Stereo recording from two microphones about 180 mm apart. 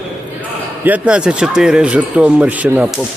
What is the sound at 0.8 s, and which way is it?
Speech, 10° right (ahead or behind).